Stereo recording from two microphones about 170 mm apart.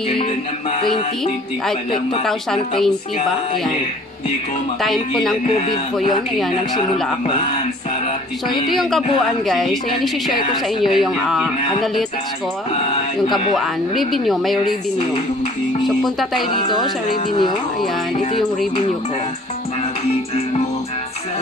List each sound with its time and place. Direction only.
0.2 s music: 30° left (ahead or behind)
2.2 s a woman's voice: centre (ahead or behind)
4.8 s a woman's voice: centre (ahead or behind)
9.2 s a woman's voice: centre (ahead or behind)
13.6 s a woman's voice: centre (ahead or behind)
15.8 s speech: centre (ahead or behind)
17.3 s speech: 25° left (ahead or behind)